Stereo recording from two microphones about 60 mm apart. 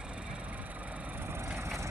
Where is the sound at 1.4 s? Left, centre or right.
Right.